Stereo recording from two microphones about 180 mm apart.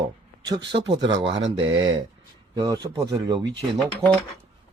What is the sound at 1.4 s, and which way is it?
Speech, 90° right.